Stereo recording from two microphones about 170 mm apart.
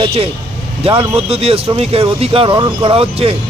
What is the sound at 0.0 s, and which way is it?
Speech, 35° right (ahead or behind).